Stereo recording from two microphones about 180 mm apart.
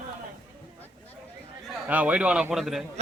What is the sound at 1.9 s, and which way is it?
Speech, 10° right (ahead or behind).